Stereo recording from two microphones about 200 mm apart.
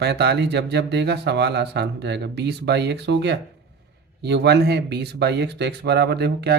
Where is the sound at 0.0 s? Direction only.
55° right (ahead or behind).